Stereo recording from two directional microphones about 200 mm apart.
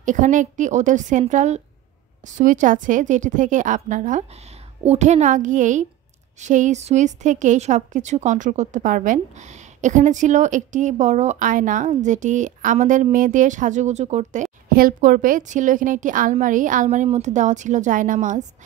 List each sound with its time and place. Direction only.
0.0 s a woman's voice: 40° right (ahead or behind)